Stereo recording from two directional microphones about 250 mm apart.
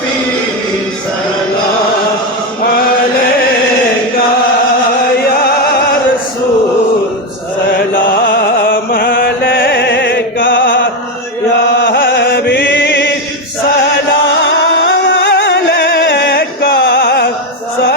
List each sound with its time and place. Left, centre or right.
5.2 s music: left
7.8 s chant: left
11.8 s chant: left
12.8 s a sound: left
14.4 s music: left